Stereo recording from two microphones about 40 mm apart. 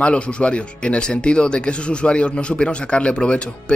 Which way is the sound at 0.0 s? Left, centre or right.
Left.